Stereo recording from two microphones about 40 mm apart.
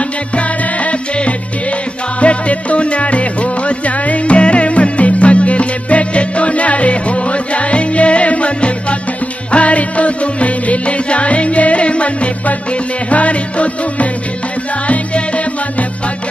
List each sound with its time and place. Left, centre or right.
0.4 s music: left